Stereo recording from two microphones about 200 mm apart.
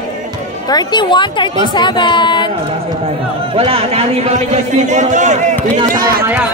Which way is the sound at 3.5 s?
30° right (ahead or behind).